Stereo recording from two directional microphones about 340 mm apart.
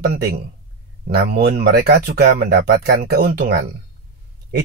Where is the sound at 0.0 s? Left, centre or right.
Right.